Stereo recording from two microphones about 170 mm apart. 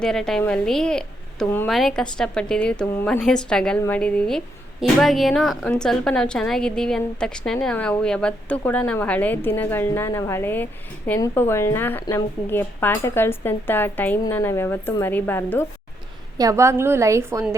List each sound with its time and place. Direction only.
0.0 s a woman's voice: 5° left (ahead or behind)
16.4 s a woman's voice: 20° right (ahead or behind)